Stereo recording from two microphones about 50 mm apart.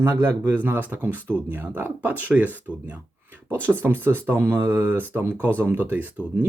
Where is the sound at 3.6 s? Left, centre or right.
Right.